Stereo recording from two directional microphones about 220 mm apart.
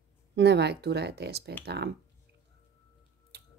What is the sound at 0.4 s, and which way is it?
A woman's voice, 50° right (ahead or behind).